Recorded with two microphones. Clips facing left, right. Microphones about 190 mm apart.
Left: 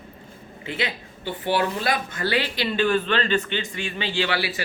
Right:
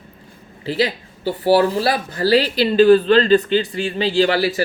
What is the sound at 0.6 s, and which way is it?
Speech, 35° right (ahead or behind).